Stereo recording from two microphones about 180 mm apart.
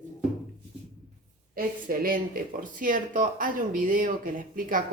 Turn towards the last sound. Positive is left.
turn(degrees=-50)  # may be behind; listen again after turning